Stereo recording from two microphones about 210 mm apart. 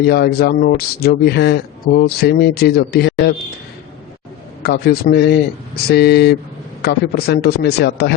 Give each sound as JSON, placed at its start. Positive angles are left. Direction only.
{"t": 0.0, "sound": "speech", "side_deg": 50}
{"t": 4.6, "sound": "speech", "side_deg": 50}